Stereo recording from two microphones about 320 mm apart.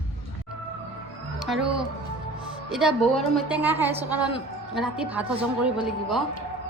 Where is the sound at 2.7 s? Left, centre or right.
Centre.